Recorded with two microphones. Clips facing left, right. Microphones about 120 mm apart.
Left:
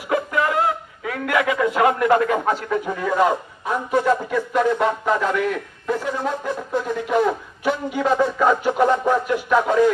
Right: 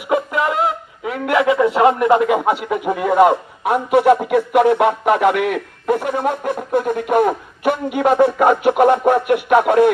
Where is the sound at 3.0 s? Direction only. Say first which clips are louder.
Right 7 dB; 60° right (ahead or behind).